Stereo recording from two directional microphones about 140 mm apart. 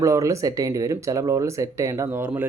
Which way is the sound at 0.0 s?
25° right (ahead or behind).